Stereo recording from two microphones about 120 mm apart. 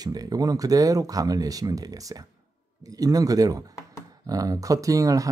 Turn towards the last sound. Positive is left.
turn(degrees=-30)  # may be behind; listen again after turning